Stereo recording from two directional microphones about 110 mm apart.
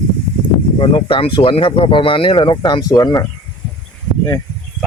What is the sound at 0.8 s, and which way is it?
Speech, 55° left (ahead or behind).